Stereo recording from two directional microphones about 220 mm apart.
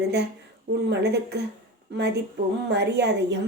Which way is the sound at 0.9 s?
50° right (ahead or behind).